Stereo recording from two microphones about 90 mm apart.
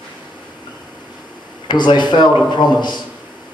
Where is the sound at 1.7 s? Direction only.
55° left (ahead or behind).